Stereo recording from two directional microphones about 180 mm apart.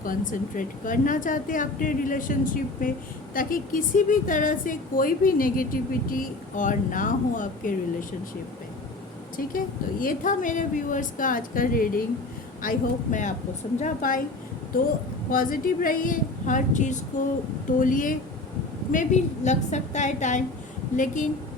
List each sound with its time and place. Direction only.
0.0 s a woman's voice: 50° left (ahead or behind)
10.0 s a woman's voice: 50° left (ahead or behind)
15.3 s a woman's voice: 50° left (ahead or behind)